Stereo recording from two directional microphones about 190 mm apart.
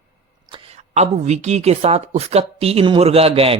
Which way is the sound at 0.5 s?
30° right (ahead or behind).